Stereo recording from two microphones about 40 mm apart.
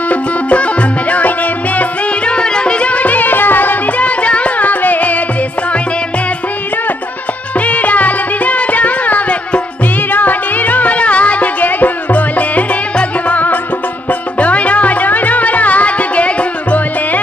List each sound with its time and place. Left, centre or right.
0.1 s music: left
2.2 s music: left
4.0 s music: left
7.6 s music: left